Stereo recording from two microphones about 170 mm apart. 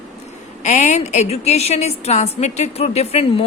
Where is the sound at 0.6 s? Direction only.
45° left (ahead or behind).